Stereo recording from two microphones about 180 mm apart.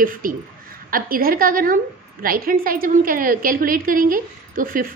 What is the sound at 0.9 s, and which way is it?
A woman's voice, 55° right (ahead or behind).